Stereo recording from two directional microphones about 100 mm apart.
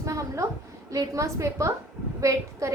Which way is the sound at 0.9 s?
35° right (ahead or behind).